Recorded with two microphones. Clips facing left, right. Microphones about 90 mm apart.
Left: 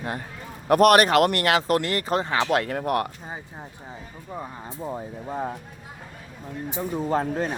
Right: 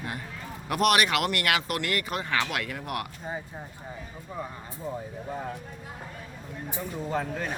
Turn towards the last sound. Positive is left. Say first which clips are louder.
# left 6 dB
turn(degrees=35)  # may be behind; listen again after turning